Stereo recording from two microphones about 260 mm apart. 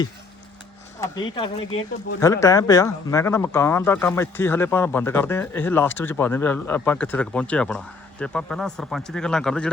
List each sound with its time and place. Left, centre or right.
1.0 s speech: centre